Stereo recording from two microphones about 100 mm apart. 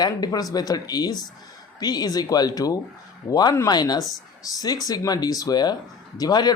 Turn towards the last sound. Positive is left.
turn(degrees=45)  # may be behind; listen again after turning